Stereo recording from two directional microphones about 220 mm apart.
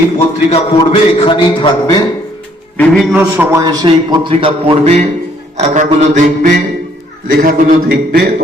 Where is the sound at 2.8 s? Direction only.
5° right (ahead or behind); by 5.1 s 30° right (ahead or behind).